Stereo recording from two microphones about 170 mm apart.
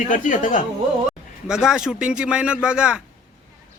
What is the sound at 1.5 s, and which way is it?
Speech, 5° right (ahead or behind).